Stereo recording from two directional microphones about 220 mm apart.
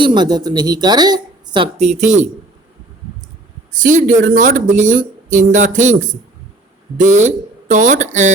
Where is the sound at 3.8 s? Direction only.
35° right (ahead or behind).